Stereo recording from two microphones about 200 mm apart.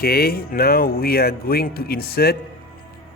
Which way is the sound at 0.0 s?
50° left (ahead or behind).